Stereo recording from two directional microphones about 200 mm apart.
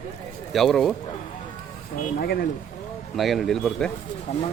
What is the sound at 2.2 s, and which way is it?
Speech, 50° left (ahead or behind).